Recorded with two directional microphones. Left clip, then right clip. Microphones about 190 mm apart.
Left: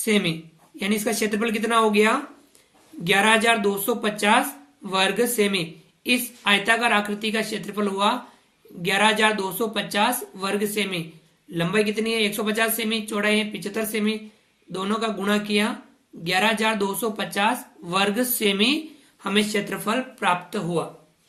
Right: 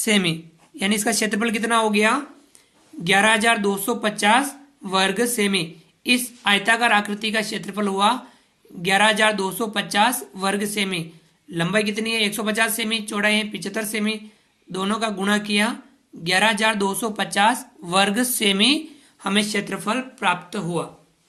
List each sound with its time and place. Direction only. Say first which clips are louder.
0.0 s speech: right 2 dB; 45° right (ahead or behind); by 20.8 s 25° right (ahead or behind)